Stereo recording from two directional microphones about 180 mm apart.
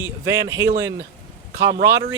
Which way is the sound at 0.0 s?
15° right (ahead or behind).